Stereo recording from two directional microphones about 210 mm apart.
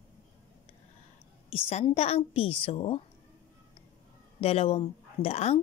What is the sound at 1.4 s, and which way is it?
Speech, 25° left (ahead or behind).